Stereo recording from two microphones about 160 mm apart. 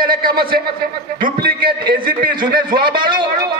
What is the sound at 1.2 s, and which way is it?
Speech, 65° right (ahead or behind).